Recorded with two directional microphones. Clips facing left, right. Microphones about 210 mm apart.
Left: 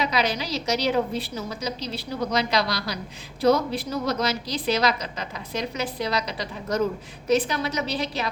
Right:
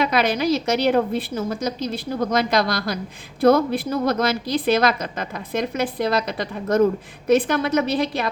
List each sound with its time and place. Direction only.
0.0 s a woman's voice: 55° right (ahead or behind)